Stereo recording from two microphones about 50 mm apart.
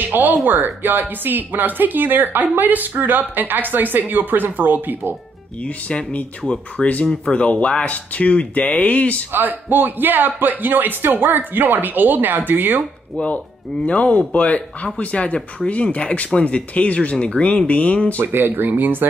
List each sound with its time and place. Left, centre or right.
0.0 s speech: right
5.6 s speech: left
9.3 s speech: right
13.2 s speech: left
18.2 s speech: right